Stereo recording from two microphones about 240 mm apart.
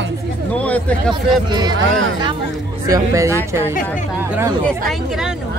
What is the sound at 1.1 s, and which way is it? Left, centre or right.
Speech, centre.